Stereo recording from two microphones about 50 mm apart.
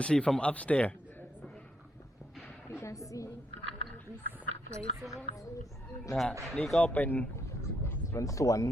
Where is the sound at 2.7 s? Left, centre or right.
Left.